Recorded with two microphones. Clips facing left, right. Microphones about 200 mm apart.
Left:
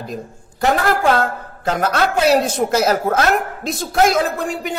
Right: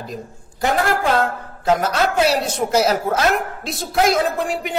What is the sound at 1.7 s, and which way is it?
Speech, 50° left (ahead or behind).